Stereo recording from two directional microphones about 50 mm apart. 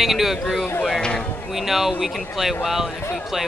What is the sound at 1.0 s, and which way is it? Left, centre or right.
Speech, centre.